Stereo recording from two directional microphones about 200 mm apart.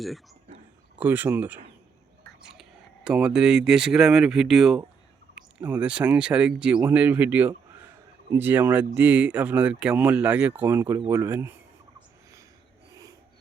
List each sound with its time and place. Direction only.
0.9 s speech: 10° right (ahead or behind)
2.6 s speech: 5° right (ahead or behind)
12.9 s a sound: 15° right (ahead or behind)